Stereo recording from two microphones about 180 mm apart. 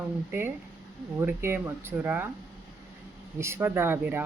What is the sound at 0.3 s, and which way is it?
Speech, 10° right (ahead or behind).